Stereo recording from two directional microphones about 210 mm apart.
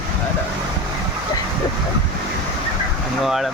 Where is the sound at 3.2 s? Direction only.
Centre (ahead or behind).